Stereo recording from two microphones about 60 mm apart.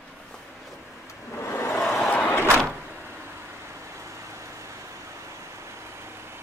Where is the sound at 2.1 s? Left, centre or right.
Left.